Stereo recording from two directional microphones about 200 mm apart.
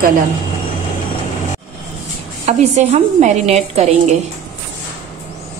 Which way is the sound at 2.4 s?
35° right (ahead or behind).